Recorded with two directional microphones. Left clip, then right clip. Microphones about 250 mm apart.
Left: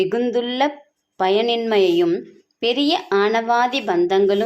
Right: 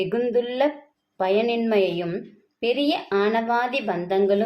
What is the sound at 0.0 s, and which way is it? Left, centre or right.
A woman's voice, left.